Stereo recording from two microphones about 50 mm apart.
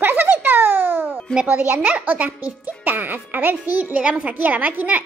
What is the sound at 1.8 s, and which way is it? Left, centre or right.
Speech, right.